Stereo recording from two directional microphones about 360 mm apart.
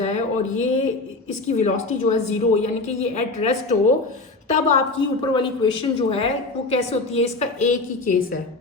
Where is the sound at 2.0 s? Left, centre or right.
Centre.